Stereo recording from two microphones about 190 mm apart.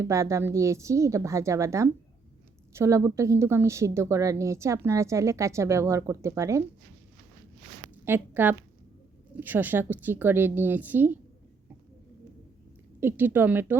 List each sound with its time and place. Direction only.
0.0 s speech: 15° right (ahead or behind)
8.0 s speech: 10° right (ahead or behind)
13.0 s speech: 10° right (ahead or behind)